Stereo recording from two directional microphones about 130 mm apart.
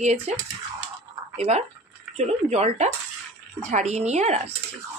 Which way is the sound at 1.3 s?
55° right (ahead or behind).